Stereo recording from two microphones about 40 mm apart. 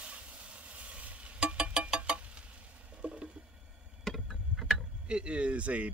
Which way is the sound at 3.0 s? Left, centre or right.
Right.